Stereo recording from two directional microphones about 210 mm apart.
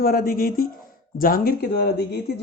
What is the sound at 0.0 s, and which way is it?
Speech, 45° left (ahead or behind).